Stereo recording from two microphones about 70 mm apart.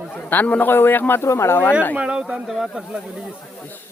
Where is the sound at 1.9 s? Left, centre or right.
Centre.